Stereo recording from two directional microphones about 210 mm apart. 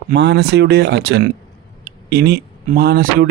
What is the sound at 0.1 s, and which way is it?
Speech, 55° right (ahead or behind).